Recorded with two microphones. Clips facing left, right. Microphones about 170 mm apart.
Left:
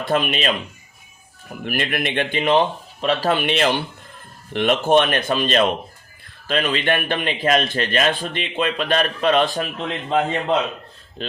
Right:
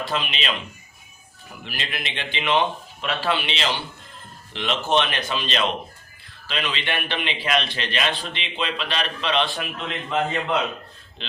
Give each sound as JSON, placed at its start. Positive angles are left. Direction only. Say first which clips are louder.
{"t": 0.0, "sound": "a man's voice", "louder": "left 7 dB", "side_deg": 50}
{"t": 11.2, "sound": "a man's voice", "louder": "left 9 dB", "side_deg": 45}